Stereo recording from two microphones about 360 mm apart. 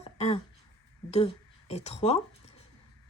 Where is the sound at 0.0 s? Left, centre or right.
Centre.